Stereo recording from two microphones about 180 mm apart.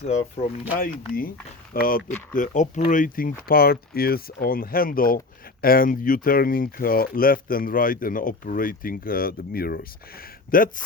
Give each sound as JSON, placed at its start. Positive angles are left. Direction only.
{"t": 0.0, "sound": "speech", "side_deg": 35}
{"t": 0.8, "sound": "speech", "side_deg": 55}